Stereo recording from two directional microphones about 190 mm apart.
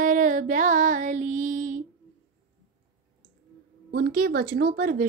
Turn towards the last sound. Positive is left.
turn(degrees=-50)  # may be behind; listen again after turning